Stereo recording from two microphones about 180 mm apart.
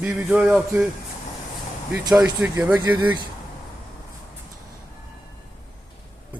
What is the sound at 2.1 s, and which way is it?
Speech, 5° right (ahead or behind).